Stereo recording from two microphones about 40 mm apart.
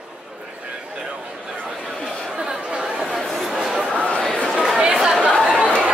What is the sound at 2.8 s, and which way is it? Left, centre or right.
Chatter, centre.